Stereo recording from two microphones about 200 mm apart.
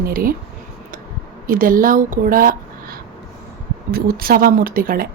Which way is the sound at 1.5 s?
45° right (ahead or behind).